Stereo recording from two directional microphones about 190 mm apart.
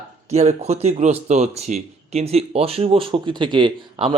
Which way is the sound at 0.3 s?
35° right (ahead or behind).